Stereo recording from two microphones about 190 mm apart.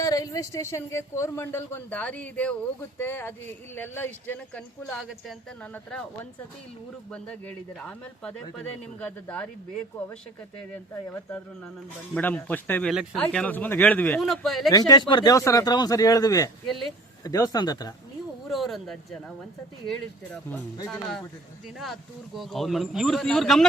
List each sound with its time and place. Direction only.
0.0 s speech: 20° left (ahead or behind)
7.1 s speech: 5° left (ahead or behind)
10.9 s speech: 10° left (ahead or behind)
14.7 s speech: 20° left (ahead or behind)
18.4 s speech: centre (ahead or behind)
22.4 s speech: centre (ahead or behind)